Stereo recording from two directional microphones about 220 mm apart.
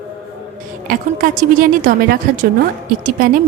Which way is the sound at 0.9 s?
40° right (ahead or behind).